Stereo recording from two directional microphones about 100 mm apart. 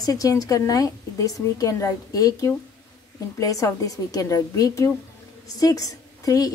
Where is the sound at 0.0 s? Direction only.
35° left (ahead or behind).